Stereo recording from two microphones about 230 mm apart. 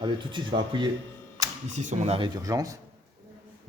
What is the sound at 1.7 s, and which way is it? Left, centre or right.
Speech, right.